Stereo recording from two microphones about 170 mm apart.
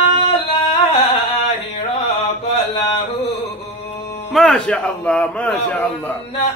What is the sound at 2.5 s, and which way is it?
Mantra, 40° left (ahead or behind).